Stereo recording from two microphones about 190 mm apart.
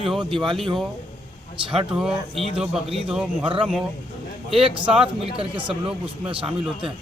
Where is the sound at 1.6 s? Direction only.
25° right (ahead or behind).